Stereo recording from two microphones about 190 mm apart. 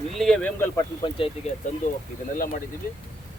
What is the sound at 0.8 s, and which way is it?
Speech, 25° left (ahead or behind).